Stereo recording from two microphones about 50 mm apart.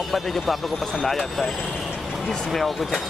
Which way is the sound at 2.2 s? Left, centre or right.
Centre.